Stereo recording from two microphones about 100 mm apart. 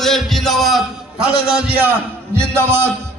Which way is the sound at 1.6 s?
15° right (ahead or behind).